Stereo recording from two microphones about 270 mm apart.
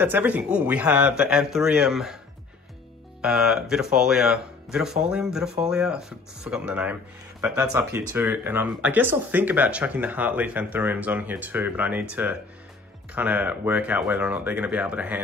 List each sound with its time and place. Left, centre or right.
0.0 s speech: centre
3.2 s speech: centre